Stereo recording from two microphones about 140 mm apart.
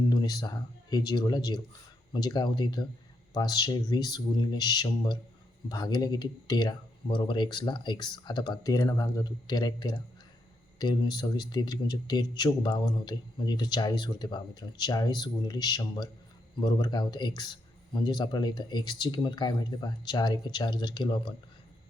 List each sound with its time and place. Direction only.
0.1 s speech: 30° left (ahead or behind)